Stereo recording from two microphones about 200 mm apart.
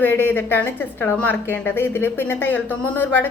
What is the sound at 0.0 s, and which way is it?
A woman's voice, 10° left (ahead or behind).